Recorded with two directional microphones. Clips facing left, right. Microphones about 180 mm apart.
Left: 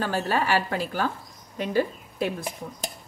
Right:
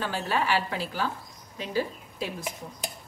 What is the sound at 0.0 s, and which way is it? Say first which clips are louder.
A woman's voice: left 3 dB; 45° left (ahead or behind).